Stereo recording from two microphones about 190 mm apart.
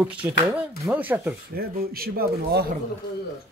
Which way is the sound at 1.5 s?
50° right (ahead or behind).